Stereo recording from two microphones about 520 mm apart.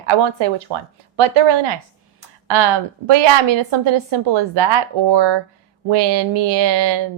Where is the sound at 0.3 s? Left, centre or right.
Right.